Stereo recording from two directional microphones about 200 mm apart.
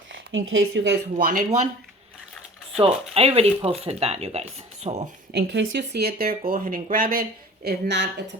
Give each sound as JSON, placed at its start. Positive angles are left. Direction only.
{"t": 0.1, "sound": "speech", "side_deg": -75}
{"t": 1.1, "sound": "speech", "side_deg": -40}
{"t": 2.7, "sound": "speech", "side_deg": -30}
{"t": 5.3, "sound": "speech", "side_deg": -65}